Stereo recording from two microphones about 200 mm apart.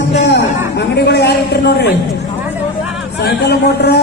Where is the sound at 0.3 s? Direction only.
55° left (ahead or behind).